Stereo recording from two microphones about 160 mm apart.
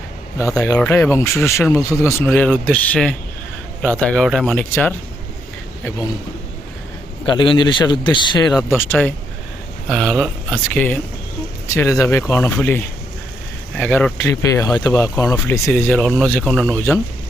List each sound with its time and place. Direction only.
0.3 s speech: 20° left (ahead or behind)
7.3 s speech: 30° left (ahead or behind)
8.7 s speech: 15° left (ahead or behind)
9.9 s speech: centre (ahead or behind)
11.7 s speech: 20° left (ahead or behind)
14.2 s speech: 20° left (ahead or behind)
15.9 s speech: 5° left (ahead or behind)